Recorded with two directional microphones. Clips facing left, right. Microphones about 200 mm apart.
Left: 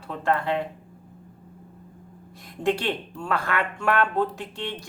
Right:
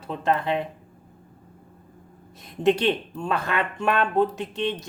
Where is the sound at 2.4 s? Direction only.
20° right (ahead or behind).